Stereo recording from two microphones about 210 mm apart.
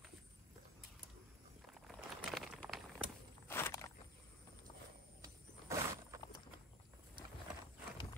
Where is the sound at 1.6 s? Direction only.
Centre (ahead or behind).